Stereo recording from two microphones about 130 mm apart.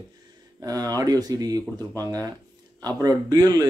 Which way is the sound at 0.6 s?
25° right (ahead or behind).